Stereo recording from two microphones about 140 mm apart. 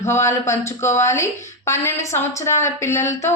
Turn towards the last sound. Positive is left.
turn(degrees=20)  # may be behind; listen again after turning